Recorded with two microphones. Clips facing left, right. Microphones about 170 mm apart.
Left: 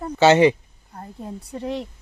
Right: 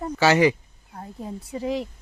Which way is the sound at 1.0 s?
Centre (ahead or behind).